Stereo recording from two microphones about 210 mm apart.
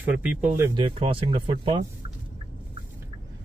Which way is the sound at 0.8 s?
25° right (ahead or behind).